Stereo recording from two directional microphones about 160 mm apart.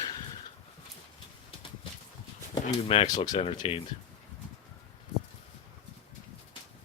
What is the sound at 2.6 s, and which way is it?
Speech, 35° left (ahead or behind).